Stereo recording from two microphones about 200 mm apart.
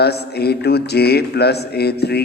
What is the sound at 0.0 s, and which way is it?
A man's voice, 55° left (ahead or behind).